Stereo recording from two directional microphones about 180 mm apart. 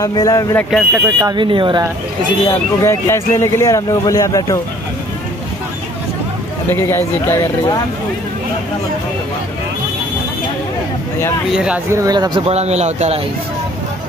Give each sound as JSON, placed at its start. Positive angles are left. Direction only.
{"t": 0.0, "sound": "speech", "side_deg": 20}
{"t": 0.7, "sound": "speech", "side_deg": 0}
{"t": 1.2, "sound": "speech", "side_deg": -25}
{"t": 2.8, "sound": "a man's voice", "side_deg": 15}
{"t": 6.7, "sound": "a man's voice", "side_deg": 15}
{"t": 11.5, "sound": "speech", "side_deg": -5}
{"t": 12.0, "sound": "speech", "side_deg": -20}
{"t": 12.4, "sound": "a man's voice", "side_deg": -35}